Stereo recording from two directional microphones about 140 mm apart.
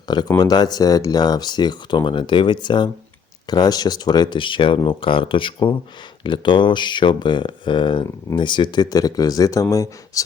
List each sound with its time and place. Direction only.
0.1 s speech: 30° left (ahead or behind)